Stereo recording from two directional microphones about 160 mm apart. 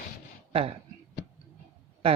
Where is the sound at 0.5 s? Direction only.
35° right (ahead or behind).